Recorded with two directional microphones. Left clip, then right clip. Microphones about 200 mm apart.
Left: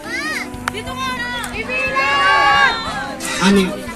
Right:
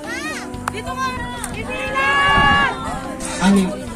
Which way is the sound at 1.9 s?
15° left (ahead or behind).